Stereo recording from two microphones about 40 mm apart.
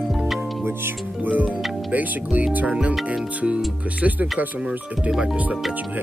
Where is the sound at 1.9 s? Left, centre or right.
Right.